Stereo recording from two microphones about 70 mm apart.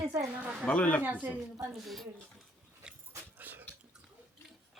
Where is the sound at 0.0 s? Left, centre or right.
Right.